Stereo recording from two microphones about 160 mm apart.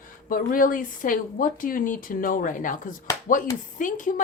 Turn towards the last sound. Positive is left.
turn(degrees=55)  # may be behind; listen again after turning